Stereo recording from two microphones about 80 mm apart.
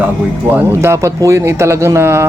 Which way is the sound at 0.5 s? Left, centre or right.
Right.